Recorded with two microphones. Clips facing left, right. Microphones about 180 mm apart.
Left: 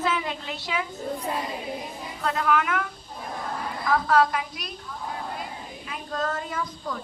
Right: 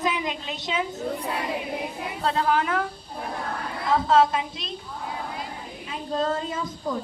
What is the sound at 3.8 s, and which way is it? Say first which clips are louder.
Speech: right 2 dB; 25° right (ahead or behind).